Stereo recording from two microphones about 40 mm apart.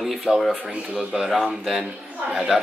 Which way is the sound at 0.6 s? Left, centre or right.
Right.